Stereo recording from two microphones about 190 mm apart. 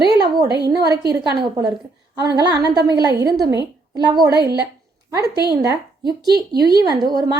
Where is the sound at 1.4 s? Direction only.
20° right (ahead or behind).